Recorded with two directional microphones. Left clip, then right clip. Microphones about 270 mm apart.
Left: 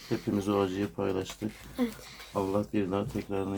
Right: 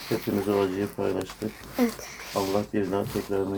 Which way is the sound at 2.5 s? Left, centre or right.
Left.